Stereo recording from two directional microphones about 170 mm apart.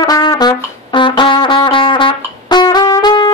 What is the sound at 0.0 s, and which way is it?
Brass instrument, 20° left (ahead or behind).